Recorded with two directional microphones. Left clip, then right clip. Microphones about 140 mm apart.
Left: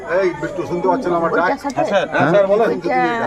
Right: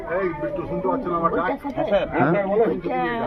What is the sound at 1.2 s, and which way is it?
Speech, 75° left (ahead or behind).